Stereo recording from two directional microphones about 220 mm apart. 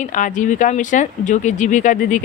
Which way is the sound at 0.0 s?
35° left (ahead or behind).